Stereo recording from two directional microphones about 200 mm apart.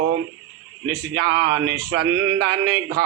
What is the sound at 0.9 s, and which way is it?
A man's voice, 60° right (ahead or behind).